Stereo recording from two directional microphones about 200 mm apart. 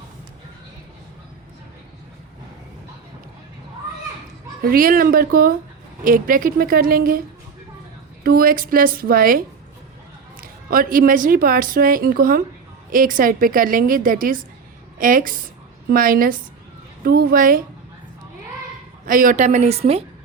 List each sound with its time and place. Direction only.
4.6 s speech: 45° right (ahead or behind)
8.2 s speech: 45° right (ahead or behind)
10.4 s speech: 45° right (ahead or behind)
19.0 s a woman's voice: 45° right (ahead or behind)